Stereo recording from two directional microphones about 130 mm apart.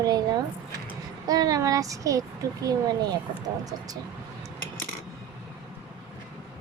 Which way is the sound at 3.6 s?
30° right (ahead or behind).